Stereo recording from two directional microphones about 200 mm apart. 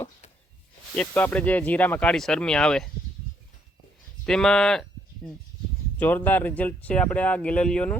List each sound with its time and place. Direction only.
0.9 s speech: 10° left (ahead or behind)
4.3 s speech: 5° left (ahead or behind)